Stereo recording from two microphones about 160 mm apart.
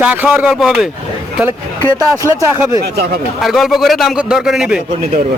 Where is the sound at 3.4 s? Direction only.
Centre (ahead or behind).